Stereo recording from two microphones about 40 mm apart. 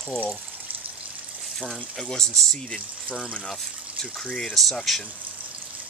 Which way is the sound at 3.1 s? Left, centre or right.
Left.